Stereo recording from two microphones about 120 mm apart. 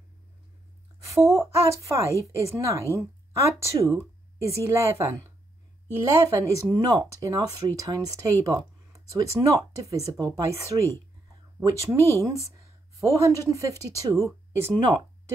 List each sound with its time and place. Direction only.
1.2 s speech: 25° right (ahead or behind)